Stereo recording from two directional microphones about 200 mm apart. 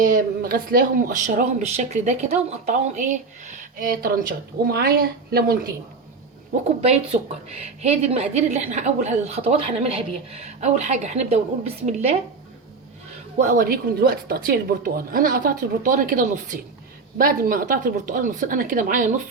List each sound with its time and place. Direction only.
0.0 s a woman's voice: 45° right (ahead or behind)
13.4 s speech: 40° right (ahead or behind)